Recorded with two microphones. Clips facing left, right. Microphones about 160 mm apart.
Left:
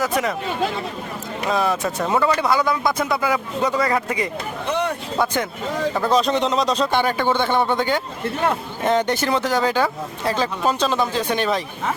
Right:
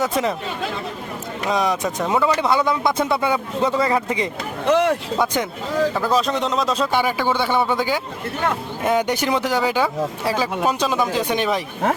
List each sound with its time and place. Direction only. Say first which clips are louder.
0.0 s a man's voice: right 1 dB; 25° right (ahead or behind)
1.5 s a man's voice: even; 15° right (ahead or behind)
4.7 s speech: right 6 dB; 90° right
5.2 s speech: left 1 dB; 15° right (ahead or behind)
5.9 s speech: left 1 dB; 5° right (ahead or behind)